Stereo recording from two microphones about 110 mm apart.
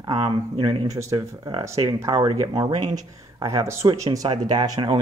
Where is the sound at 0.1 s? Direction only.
50° right (ahead or behind).